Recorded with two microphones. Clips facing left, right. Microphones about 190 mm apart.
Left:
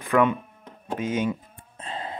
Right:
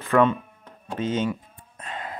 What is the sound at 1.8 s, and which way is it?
Gasp, 30° left (ahead or behind).